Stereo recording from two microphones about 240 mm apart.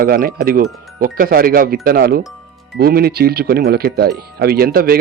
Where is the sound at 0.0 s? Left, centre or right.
Right.